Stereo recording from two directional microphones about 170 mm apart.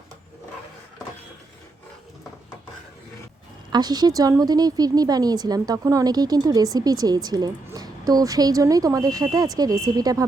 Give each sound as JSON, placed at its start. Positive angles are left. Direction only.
{"t": 3.7, "sound": "a woman's voice", "side_deg": -25}